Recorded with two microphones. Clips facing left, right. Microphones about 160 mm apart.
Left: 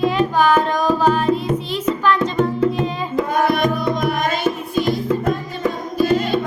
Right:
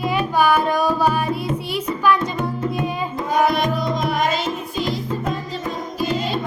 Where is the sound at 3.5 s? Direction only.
55° left (ahead or behind).